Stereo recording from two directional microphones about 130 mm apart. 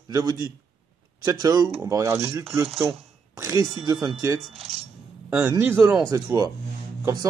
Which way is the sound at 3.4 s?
25° right (ahead or behind).